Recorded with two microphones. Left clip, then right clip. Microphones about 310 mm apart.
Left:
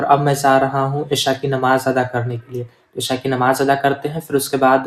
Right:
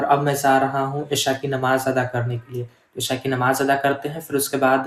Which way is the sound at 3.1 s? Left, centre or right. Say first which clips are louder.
Left 4 dB; left.